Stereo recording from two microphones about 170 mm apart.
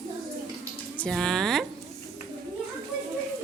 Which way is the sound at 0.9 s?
5° left (ahead or behind).